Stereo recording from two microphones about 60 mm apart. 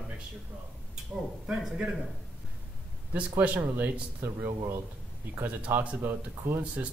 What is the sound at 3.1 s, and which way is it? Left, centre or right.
Speech, right.